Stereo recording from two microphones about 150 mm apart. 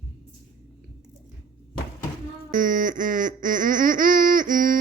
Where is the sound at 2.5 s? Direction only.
60° right (ahead or behind).